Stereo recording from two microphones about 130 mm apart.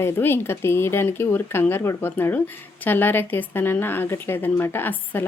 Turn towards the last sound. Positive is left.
turn(degrees=15)  # may be behind; listen again after turning